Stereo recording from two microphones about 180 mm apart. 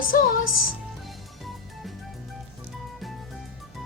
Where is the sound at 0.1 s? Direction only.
50° left (ahead or behind).